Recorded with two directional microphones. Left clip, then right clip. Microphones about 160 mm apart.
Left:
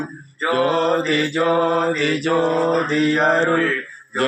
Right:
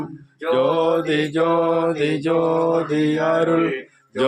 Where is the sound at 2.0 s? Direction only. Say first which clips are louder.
Left 1 dB; 10° right (ahead or behind).